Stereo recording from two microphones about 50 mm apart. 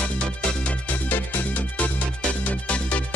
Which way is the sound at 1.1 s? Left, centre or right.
Left.